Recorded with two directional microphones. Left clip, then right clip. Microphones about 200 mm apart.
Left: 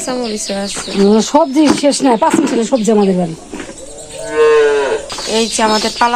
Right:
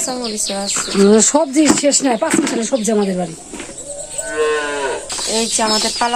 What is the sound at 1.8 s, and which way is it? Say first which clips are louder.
Speech: left 4 dB; 15° left (ahead or behind).